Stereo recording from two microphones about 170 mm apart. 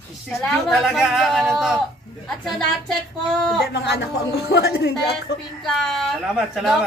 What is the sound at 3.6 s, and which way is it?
Speech, 85° left.